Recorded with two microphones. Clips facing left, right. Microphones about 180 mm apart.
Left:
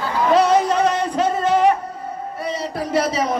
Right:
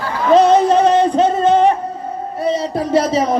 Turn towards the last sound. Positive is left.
turn(degrees=-30)  # may be behind; listen again after turning